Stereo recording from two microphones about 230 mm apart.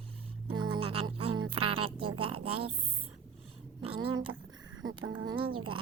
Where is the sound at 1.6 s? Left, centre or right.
Right.